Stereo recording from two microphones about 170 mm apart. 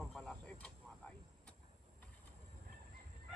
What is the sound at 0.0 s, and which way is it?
Vehicle, centre (ahead or behind).